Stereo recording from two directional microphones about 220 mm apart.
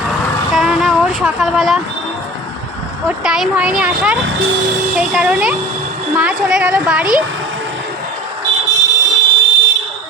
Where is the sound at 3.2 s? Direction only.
5° right (ahead or behind).